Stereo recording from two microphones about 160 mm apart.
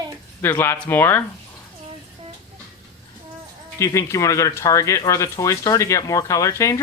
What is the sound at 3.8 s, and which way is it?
Speech, 20° left (ahead or behind).